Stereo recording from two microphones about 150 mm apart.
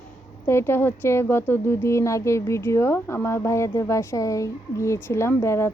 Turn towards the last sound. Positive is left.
turn(degrees=15)  # may be behind; listen again after turning